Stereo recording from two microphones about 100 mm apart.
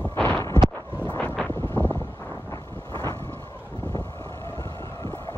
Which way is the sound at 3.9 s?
35° left (ahead or behind).